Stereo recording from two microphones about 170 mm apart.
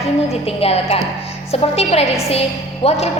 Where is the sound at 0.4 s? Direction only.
35° left (ahead or behind).